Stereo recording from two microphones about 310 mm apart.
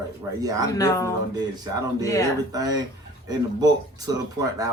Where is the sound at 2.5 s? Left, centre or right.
Centre.